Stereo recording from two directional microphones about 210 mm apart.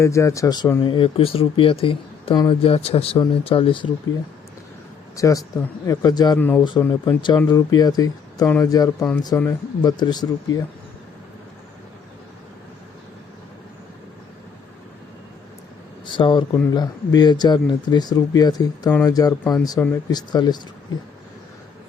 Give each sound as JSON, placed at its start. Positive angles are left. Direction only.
{"t": 0.0, "sound": "speech", "side_deg": 15}
{"t": 5.1, "sound": "speech", "side_deg": 15}
{"t": 16.0, "sound": "speech", "side_deg": 25}